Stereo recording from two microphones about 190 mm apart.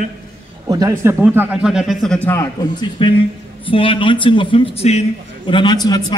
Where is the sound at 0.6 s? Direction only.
20° right (ahead or behind); by 2.5 s 10° left (ahead or behind).